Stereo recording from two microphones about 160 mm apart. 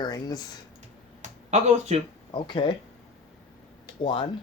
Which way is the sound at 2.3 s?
30° left (ahead or behind).